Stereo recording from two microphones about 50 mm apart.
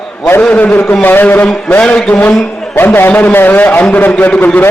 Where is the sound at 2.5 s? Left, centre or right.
Centre.